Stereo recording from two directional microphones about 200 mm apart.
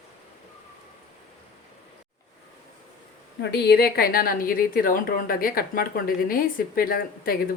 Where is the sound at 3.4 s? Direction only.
55° left (ahead or behind).